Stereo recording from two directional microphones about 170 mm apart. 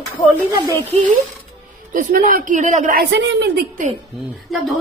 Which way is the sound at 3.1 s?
90° right.